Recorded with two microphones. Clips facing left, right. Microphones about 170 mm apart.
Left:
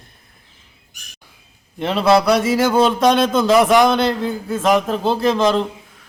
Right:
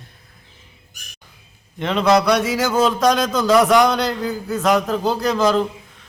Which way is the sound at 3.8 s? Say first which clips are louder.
Left 3 dB; 25° left (ahead or behind).